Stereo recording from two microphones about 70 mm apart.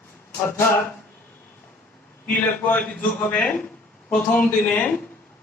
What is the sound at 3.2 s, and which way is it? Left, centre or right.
A man's voice, left.